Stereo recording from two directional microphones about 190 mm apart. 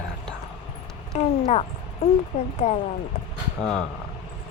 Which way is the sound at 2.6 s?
35° left (ahead or behind).